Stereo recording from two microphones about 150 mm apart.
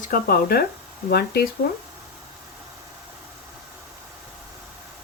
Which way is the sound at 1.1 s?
90° left.